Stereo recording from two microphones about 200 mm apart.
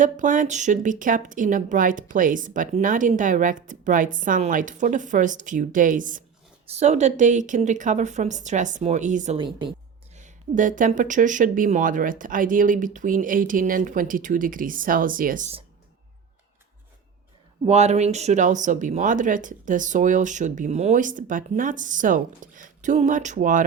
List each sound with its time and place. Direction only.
0.0 s speech: 40° right (ahead or behind)
9.4 s a woman's voice: 25° right (ahead or behind)
10.2 s speech: 40° right (ahead or behind)
17.7 s speech: 35° right (ahead or behind)